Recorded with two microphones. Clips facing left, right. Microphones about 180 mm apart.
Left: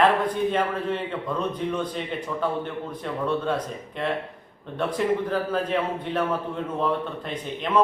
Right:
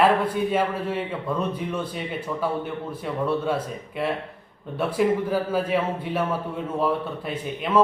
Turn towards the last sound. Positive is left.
turn(degrees=-5)  # may be behind; listen again after turning